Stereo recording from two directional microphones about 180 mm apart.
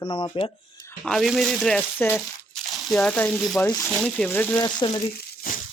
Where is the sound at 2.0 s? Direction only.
10° left (ahead or behind).